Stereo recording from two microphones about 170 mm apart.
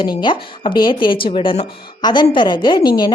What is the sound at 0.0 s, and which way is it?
Speech, 25° left (ahead or behind).